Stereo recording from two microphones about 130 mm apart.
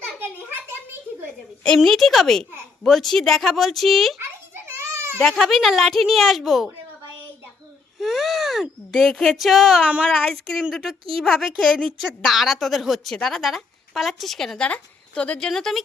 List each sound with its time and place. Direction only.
1.6 s speech: 5° left (ahead or behind)
4.2 s children playing: 15° right (ahead or behind)
5.2 s speech: centre (ahead or behind)
7.9 s speech: centre (ahead or behind)